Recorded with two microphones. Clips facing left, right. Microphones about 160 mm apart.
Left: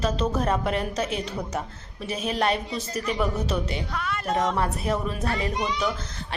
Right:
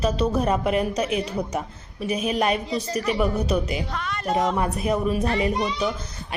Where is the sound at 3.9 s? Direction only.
5° left (ahead or behind).